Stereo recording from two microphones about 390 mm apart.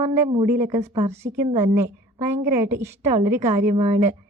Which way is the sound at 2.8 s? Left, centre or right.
Centre.